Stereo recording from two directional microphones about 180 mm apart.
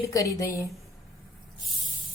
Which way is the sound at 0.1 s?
20° left (ahead or behind).